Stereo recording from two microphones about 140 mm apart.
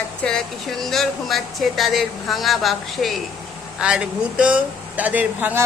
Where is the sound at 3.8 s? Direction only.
5° right (ahead or behind).